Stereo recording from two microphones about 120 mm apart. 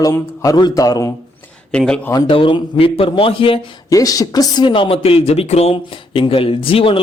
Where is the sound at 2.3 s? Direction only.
45° left (ahead or behind).